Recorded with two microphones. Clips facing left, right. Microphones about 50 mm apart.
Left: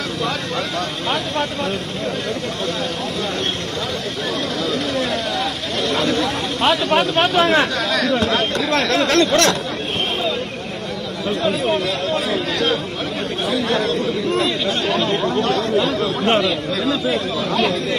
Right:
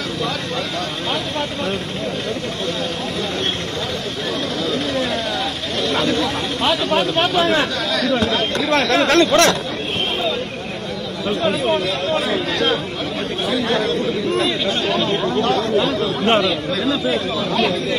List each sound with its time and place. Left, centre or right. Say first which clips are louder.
6.0 s speech: even; left
8.6 s speech: right 4 dB; right
12.3 s chatter: right 1 dB; right
14.4 s speech: even; right
16.3 s speech: right 1 dB; centre